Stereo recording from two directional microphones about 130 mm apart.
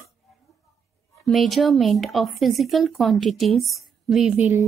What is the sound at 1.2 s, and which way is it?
Speech, centre (ahead or behind).